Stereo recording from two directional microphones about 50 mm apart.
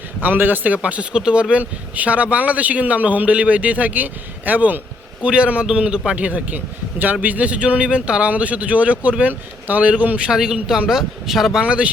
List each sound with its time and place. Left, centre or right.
0.2 s speech: right
5.2 s speech: right
6.1 s a man's voice: right
10.3 s speech: centre
11.6 s speech: right